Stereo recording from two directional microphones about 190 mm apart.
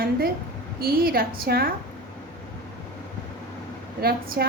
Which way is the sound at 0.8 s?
50° right (ahead or behind).